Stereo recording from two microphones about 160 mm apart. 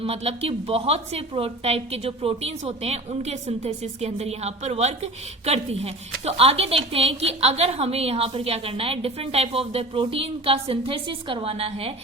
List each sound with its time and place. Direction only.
0.0 s a woman's voice: 35° right (ahead or behind)